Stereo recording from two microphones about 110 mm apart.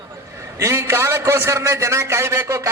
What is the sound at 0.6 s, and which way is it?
A man's voice, 25° right (ahead or behind).